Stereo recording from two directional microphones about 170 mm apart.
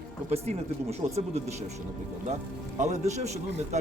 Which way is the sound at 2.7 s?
40° right (ahead or behind).